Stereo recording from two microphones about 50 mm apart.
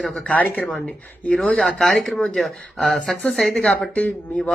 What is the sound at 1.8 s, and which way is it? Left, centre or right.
Speech, centre.